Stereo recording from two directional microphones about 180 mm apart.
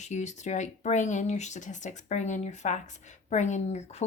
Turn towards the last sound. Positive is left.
turn(degrees=35)  # may be behind; listen again after turning